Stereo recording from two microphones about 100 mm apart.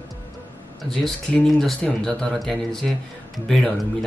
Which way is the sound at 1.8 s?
5° left (ahead or behind).